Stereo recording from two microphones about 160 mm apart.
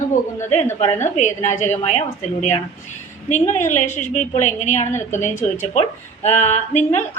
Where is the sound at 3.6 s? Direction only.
45° left (ahead or behind).